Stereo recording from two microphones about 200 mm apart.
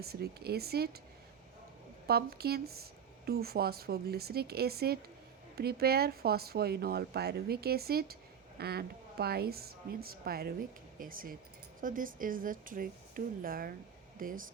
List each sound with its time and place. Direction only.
0.0 s speech: 50° right (ahead or behind)
2.0 s speech: 50° right (ahead or behind)